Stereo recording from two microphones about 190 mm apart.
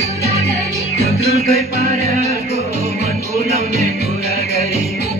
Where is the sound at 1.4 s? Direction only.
50° right (ahead or behind).